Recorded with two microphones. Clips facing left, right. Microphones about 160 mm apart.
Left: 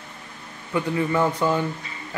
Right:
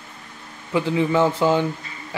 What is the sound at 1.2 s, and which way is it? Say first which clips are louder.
Speech: right 4 dB; 25° right (ahead or behind).